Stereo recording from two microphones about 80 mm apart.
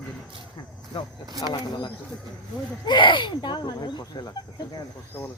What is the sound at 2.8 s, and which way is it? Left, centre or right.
Speech, left.